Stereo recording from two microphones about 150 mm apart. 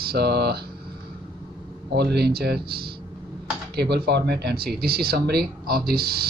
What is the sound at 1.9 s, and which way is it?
Speech, 90° right.